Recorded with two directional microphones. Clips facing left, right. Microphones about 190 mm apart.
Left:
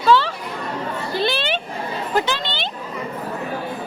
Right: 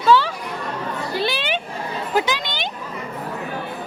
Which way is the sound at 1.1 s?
10° right (ahead or behind).